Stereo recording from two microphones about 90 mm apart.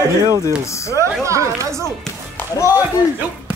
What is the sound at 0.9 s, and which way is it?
Speech, 35° right (ahead or behind).